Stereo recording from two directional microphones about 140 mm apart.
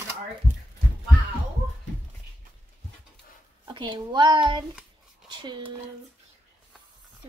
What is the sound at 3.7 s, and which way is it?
Speech, 35° right (ahead or behind).